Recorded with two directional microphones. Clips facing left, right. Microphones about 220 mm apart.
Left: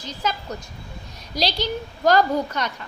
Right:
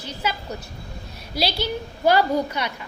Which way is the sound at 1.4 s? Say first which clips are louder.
Even; 10° right (ahead or behind).